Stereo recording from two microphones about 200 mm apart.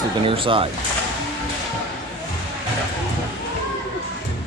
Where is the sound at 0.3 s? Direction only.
25° right (ahead or behind).